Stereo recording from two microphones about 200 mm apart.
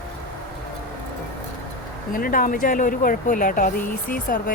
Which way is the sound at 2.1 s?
45° left (ahead or behind).